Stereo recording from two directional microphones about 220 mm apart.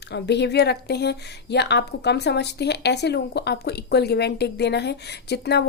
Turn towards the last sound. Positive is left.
turn(degrees=50)  # may be behind; listen again after turning